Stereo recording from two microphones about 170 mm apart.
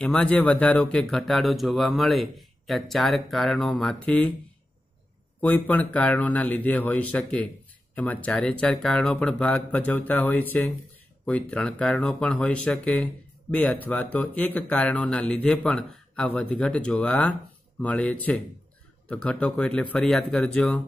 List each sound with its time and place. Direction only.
0.0 s speech: 5° left (ahead or behind)
5.4 s speech: 10° left (ahead or behind)